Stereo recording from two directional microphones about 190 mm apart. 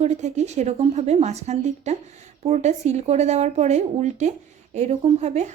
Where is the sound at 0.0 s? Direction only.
35° right (ahead or behind).